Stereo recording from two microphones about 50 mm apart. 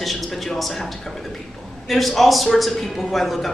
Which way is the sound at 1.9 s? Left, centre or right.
Centre.